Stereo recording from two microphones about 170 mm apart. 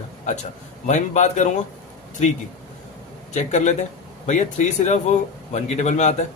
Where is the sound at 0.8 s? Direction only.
45° left (ahead or behind).